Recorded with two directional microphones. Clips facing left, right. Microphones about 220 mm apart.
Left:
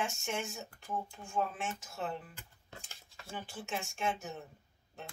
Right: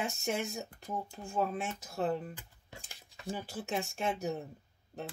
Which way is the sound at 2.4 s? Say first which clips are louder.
Right 1 dB; 15° right (ahead or behind).